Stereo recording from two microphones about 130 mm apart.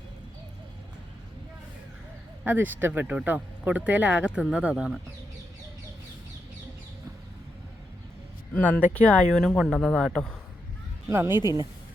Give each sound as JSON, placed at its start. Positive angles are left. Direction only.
{"t": 2.4, "sound": "speech", "side_deg": -15}
{"t": 8.5, "sound": "speech", "side_deg": 10}
{"t": 11.1, "sound": "speech", "side_deg": -15}